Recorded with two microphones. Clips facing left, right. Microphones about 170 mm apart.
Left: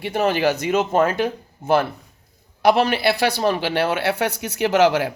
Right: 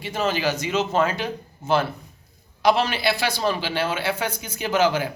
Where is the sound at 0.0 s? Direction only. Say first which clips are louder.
Left 5 dB; 60° left (ahead or behind).